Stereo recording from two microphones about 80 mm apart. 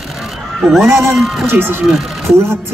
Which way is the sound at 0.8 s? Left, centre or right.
Right.